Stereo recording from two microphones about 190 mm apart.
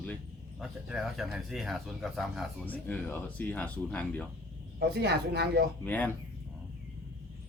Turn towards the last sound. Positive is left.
turn(degrees=10)  # may be behind; listen again after turning